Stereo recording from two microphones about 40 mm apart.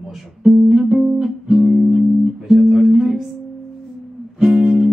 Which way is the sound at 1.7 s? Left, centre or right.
Centre.